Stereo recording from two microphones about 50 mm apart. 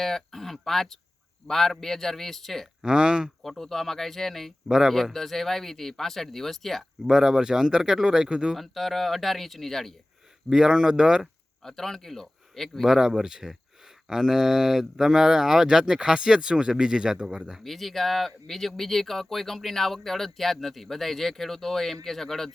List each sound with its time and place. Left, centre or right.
0.0 s speech: centre
2.8 s speech: centre
3.4 s speech: centre
4.7 s speech: centre
5.1 s speech: centre
7.0 s speech: centre
8.5 s speech: centre
10.5 s speech: centre
11.6 s a man's voice: centre
12.8 s speech: centre
17.6 s speech: centre